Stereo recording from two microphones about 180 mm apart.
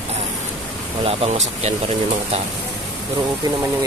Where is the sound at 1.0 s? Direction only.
30° right (ahead or behind).